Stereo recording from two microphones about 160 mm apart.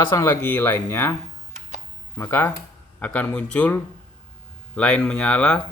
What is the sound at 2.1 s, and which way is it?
Speech, 15° left (ahead or behind).